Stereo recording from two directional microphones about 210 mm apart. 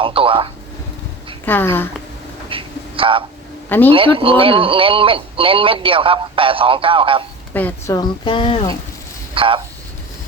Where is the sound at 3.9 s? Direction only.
25° right (ahead or behind).